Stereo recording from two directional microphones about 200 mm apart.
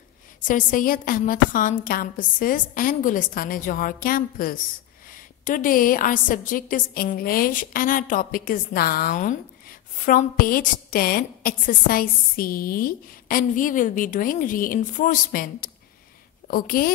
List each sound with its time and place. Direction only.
0.4 s a woman's voice: 40° left (ahead or behind)